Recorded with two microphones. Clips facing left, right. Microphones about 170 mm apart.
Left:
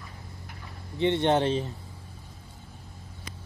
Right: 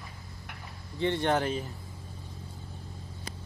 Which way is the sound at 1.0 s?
20° left (ahead or behind).